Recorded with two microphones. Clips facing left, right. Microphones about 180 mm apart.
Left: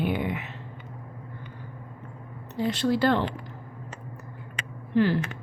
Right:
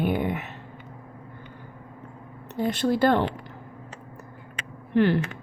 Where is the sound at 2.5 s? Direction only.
50° right (ahead or behind).